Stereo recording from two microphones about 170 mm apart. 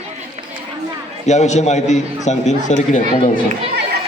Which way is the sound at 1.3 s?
40° left (ahead or behind).